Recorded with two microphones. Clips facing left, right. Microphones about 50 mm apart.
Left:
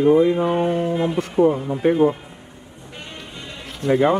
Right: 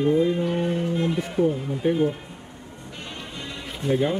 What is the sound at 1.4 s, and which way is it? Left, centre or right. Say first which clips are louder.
Speech: left 6 dB; left.